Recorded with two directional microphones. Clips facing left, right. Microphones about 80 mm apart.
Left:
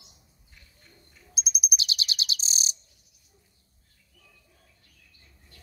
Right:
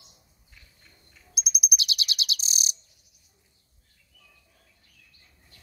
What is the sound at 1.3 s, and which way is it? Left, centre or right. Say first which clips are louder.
Bird: right 1 dB; left.